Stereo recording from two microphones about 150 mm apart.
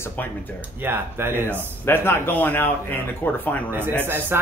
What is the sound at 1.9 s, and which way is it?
A man's voice, 15° left (ahead or behind).